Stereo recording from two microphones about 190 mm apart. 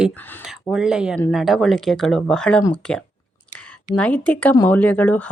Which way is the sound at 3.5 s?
5° left (ahead or behind).